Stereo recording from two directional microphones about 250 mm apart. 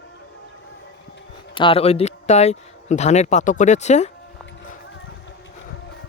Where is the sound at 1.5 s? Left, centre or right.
Left.